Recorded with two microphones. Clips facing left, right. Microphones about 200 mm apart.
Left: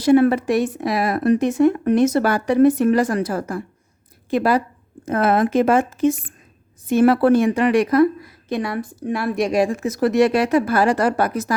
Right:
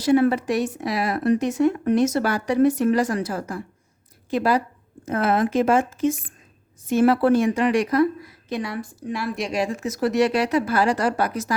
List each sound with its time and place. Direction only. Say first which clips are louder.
0.0 s a woman's voice: left 4 dB; 55° left (ahead or behind)